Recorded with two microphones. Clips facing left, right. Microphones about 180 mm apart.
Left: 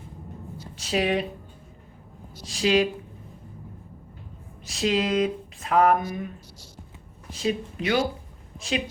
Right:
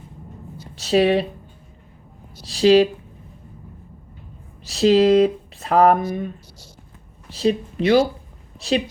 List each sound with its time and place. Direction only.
0.8 s speech: 35° right (ahead or behind)
2.4 s speech: 35° right (ahead or behind)
4.6 s speech: 35° right (ahead or behind)